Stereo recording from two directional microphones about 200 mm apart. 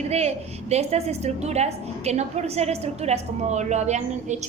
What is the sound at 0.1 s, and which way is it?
A woman's voice, 30° right (ahead or behind).